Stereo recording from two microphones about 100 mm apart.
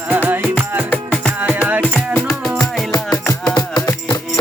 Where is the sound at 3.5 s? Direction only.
30° left (ahead or behind).